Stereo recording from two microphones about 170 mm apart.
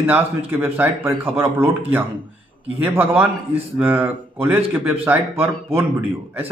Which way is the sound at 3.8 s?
10° right (ahead or behind).